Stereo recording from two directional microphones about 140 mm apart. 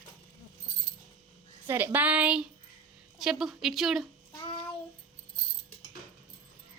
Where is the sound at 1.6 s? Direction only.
15° right (ahead or behind).